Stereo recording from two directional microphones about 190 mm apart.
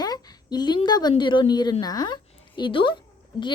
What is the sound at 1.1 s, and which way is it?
A woman's voice, 25° left (ahead or behind).